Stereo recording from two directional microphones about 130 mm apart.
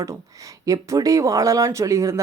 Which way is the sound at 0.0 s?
25° right (ahead or behind).